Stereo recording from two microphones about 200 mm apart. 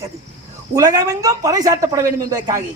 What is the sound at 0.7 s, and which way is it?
Speech, 20° right (ahead or behind).